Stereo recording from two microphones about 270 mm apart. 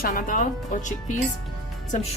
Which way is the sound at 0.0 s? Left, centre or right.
Left.